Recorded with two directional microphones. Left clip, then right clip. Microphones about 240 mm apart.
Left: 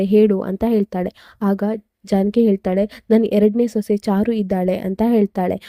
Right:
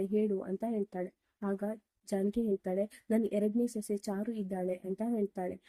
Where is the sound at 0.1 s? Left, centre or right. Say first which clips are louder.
Left 18 dB; left.